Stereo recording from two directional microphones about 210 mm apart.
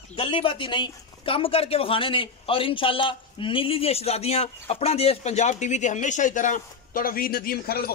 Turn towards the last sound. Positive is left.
turn(degrees=45)  # may be behind; listen again after turning